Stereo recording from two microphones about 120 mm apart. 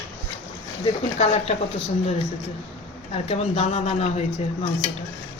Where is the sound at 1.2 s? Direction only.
65° left (ahead or behind).